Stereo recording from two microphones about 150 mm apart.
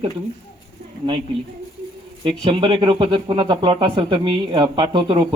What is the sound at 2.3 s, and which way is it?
Speech, 35° right (ahead or behind).